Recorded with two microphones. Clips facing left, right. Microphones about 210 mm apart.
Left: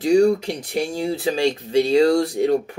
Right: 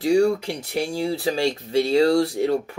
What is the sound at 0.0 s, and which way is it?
Speech, 20° left (ahead or behind).